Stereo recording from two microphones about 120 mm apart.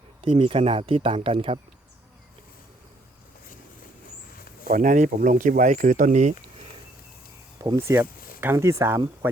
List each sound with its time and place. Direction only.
0.2 s speech: 50° right (ahead or behind)
4.6 s speech: 90° right
7.8 s speech: 20° right (ahead or behind)